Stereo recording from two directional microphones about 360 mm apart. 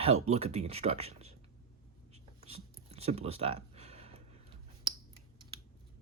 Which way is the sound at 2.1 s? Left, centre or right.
Centre.